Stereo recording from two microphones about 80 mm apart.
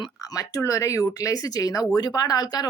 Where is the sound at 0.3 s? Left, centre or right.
Left.